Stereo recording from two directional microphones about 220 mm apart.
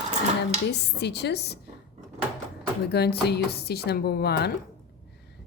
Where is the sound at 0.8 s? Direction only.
50° left (ahead or behind).